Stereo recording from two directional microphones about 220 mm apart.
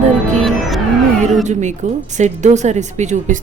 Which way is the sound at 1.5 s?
35° right (ahead or behind).